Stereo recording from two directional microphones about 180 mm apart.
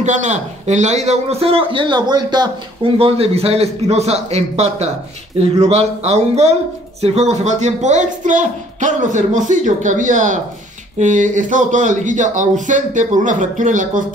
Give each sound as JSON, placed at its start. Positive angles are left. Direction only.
{"t": 0.0, "sound": "a man's voice", "side_deg": -40}